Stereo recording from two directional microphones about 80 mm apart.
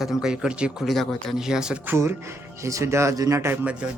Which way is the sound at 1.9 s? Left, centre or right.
Right.